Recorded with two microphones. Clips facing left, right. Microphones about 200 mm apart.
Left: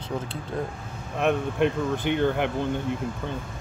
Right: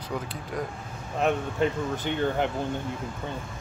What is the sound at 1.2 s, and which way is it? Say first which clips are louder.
Speech: left 2 dB; 65° left (ahead or behind).